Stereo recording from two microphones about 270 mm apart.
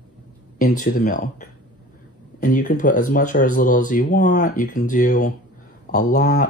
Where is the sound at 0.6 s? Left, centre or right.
Left.